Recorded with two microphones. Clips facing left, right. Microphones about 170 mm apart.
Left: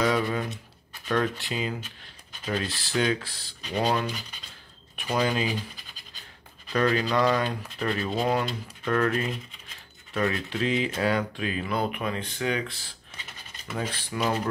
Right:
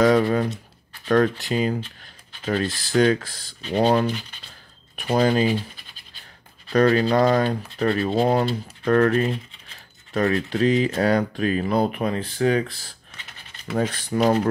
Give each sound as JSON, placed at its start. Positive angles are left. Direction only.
{"t": 0.0, "sound": "speech", "side_deg": -45}
{"t": 6.7, "sound": "speech", "side_deg": -40}